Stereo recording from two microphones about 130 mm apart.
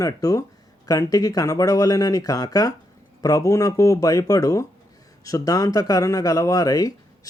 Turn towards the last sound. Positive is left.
turn(degrees=30)  # may be behind; listen again after turning